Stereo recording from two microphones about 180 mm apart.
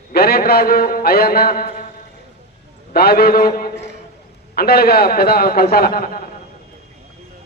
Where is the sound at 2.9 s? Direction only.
60° left (ahead or behind).